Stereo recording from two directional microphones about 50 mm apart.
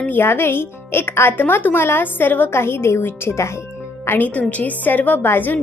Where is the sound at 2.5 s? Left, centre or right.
Left.